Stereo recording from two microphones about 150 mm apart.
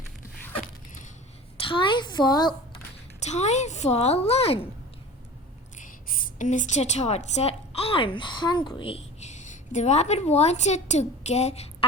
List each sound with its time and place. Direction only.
1.6 s a sound: 35° left (ahead or behind)
3.2 s speech: 50° left (ahead or behind)
5.7 s a woman's voice: 60° left (ahead or behind); by 11.9 s 45° left (ahead or behind)